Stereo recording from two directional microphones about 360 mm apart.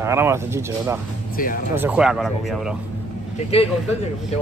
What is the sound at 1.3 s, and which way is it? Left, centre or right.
Speech, left.